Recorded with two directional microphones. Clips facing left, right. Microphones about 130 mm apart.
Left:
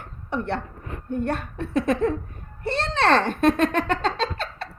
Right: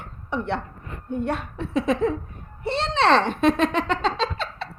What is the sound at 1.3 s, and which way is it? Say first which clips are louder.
A child's voice: even; 50° left (ahead or behind).